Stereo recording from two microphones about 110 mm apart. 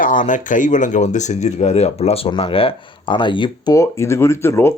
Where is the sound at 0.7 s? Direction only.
90° left.